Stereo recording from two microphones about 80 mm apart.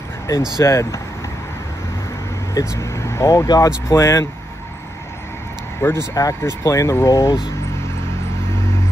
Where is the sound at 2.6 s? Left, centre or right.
Left.